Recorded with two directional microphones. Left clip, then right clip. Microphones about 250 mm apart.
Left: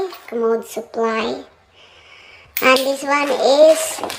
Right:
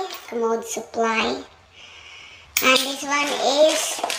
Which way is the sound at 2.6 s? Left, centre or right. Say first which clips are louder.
Left 4 dB; centre.